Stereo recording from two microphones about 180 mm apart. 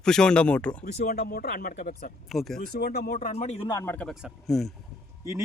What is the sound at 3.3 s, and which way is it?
Speech, 35° left (ahead or behind).